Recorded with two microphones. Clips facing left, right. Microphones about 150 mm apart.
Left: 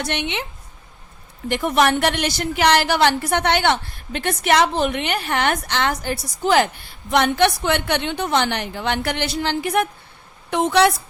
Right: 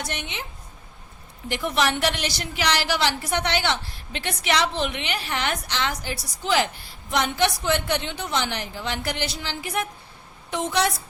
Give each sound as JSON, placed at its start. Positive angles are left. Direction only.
{"t": 0.0, "sound": "a woman's voice", "side_deg": 70}
{"t": 1.5, "sound": "a woman's voice", "side_deg": 55}